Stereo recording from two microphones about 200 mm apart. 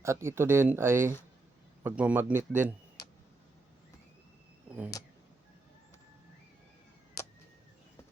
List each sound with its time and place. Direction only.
0.0 s speech: 15° right (ahead or behind)